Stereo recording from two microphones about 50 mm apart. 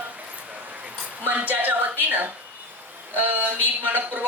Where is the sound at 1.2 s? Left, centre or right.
Right.